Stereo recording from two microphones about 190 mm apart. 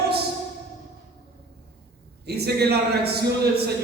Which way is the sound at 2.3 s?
55° right (ahead or behind).